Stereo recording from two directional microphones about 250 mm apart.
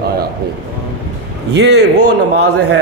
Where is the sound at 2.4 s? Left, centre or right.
Right.